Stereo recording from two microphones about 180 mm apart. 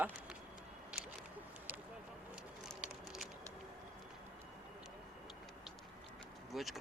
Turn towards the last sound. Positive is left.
turn(degrees=0)  # may be behind; listen again after turning